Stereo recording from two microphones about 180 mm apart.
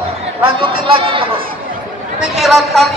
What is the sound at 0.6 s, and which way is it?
Speech, 30° right (ahead or behind).